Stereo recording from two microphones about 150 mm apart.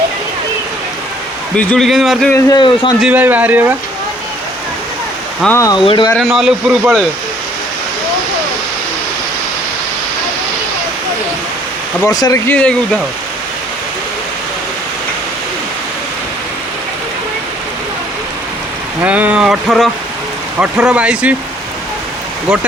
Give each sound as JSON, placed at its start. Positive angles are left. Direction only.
{"t": 1.5, "sound": "speech", "side_deg": 5}
{"t": 2.3, "sound": "a man's voice", "side_deg": 30}
{"t": 3.0, "sound": "speech", "side_deg": -10}
{"t": 5.5, "sound": "a man's voice", "side_deg": 20}
{"t": 5.8, "sound": "speech", "side_deg": 35}
{"t": 6.1, "sound": "speech", "side_deg": 0}
{"t": 12.0, "sound": "a man's voice", "side_deg": 25}
{"t": 12.5, "sound": "speech", "side_deg": 10}
{"t": 19.0, "sound": "speech", "side_deg": -10}